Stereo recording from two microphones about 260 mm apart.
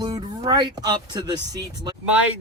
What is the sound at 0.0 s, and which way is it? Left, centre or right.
Speech, centre.